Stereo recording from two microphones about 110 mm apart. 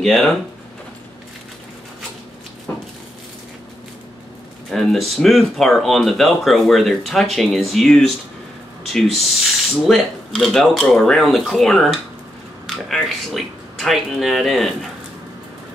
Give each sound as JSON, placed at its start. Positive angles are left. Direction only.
{"t": 0.0, "sound": "speech", "side_deg": 5}
{"t": 2.7, "sound": "a sound", "side_deg": 15}
{"t": 4.6, "sound": "speech", "side_deg": 0}